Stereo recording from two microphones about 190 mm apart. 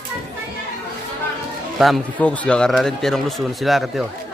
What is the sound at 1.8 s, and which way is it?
A man's voice, centre (ahead or behind).